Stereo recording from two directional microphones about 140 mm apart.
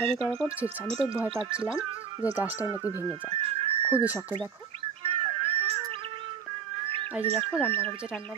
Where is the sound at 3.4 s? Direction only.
40° right (ahead or behind).